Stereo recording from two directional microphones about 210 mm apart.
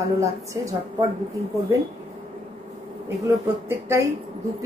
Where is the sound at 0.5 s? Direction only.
15° right (ahead or behind).